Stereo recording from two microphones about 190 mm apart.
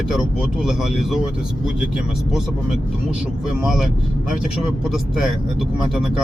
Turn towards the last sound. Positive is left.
turn(degrees=0)  # may be behind; listen again after turning